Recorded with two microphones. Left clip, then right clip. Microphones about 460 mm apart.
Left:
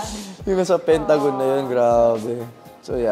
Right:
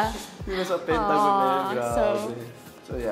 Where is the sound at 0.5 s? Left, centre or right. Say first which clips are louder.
Left 7 dB; left.